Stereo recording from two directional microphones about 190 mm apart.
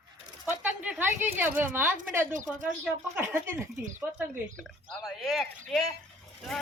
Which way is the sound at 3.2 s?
10° right (ahead or behind).